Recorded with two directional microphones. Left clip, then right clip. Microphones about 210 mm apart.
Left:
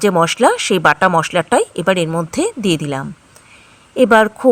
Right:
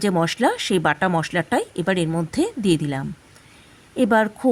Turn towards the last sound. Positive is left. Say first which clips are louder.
# left 8 dB
turn(degrees=20)  # may be behind; listen again after turning